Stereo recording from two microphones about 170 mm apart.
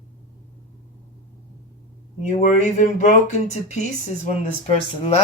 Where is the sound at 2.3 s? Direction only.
45° left (ahead or behind).